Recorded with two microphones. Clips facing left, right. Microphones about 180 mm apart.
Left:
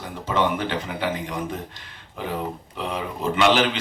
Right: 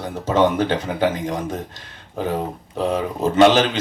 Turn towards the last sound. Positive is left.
turn(degrees=-40)  # may be behind; listen again after turning